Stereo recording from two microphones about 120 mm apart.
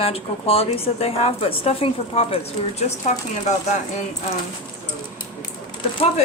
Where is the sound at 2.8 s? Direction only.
75° left (ahead or behind).